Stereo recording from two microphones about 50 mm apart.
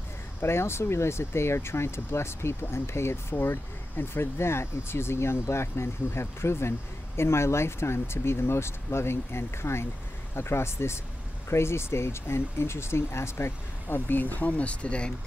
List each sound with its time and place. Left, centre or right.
0.4 s speech: left
13.9 s speech: left